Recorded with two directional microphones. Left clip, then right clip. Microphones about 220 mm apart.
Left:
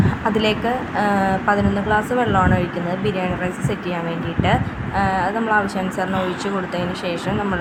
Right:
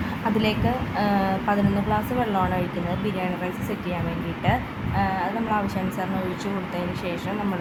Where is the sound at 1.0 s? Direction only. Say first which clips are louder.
Left 5 dB; 15° left (ahead or behind).